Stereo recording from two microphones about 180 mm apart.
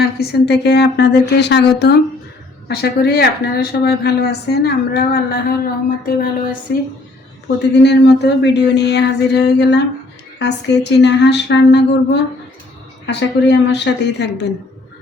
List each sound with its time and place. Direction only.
0.0 s speech: 60° left (ahead or behind)
6.7 s speech: 60° left (ahead or behind)
7.4 s speech: 70° left (ahead or behind)